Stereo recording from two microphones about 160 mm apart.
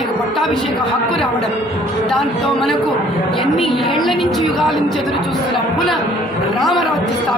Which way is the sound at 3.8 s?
35° left (ahead or behind).